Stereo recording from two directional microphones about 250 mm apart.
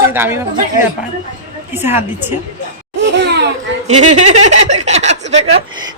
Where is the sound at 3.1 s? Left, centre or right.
Right.